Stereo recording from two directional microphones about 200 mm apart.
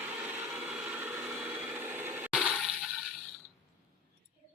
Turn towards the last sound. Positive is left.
turn(degrees=0)  # may be behind; listen again after turning